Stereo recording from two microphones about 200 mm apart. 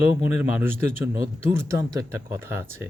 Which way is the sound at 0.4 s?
10° right (ahead or behind).